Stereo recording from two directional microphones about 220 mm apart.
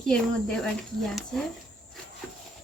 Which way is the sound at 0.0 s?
5° left (ahead or behind).